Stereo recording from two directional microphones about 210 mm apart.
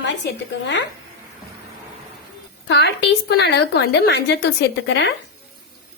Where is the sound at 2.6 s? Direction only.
55° left (ahead or behind).